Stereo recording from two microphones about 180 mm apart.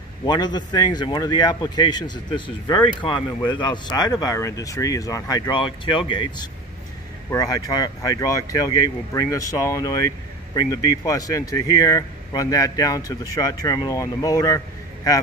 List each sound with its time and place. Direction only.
0.2 s speech: 25° left (ahead or behind)